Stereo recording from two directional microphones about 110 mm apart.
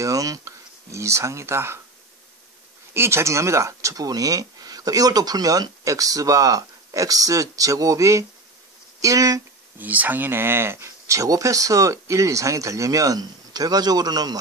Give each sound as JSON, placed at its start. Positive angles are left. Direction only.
{"t": 0.0, "sound": "speech", "side_deg": -30}
{"t": 2.9, "sound": "speech", "side_deg": -25}
{"t": 9.8, "sound": "speech", "side_deg": -15}